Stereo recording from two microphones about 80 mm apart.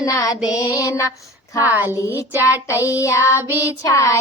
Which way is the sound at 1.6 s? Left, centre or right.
Right.